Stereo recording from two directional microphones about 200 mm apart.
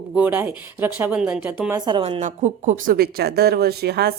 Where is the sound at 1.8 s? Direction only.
25° right (ahead or behind).